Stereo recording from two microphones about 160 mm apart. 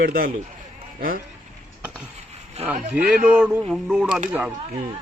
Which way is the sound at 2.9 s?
5° right (ahead or behind).